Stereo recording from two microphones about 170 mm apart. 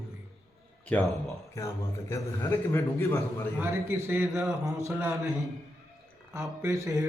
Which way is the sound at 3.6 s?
15° right (ahead or behind).